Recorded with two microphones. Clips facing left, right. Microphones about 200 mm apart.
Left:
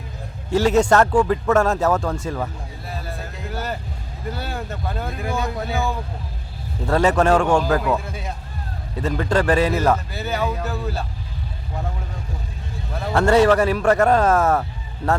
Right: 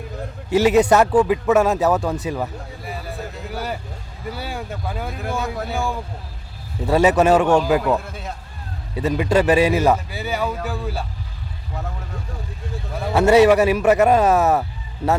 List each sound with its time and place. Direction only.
0.5 s a man's voice: 10° right (ahead or behind)
1.7 s a man's voice: 20° right (ahead or behind)
3.5 s vehicle: 10° right (ahead or behind)
4.3 s a man's voice: 10° right (ahead or behind)
7.8 s speech: centre (ahead or behind)
9.0 s a man's voice: 10° right (ahead or behind)
10.4 s speech: centre (ahead or behind)
10.7 s a man's voice: 10° right (ahead or behind)
13.1 s a man's voice: 10° right (ahead or behind)